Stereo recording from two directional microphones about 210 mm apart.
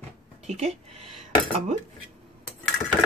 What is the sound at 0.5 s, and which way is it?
Speech, 30° right (ahead or behind).